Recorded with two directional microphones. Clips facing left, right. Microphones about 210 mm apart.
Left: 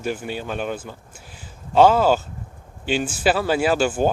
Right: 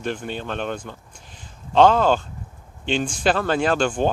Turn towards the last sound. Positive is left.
turn(degrees=5)  # may be behind; listen again after turning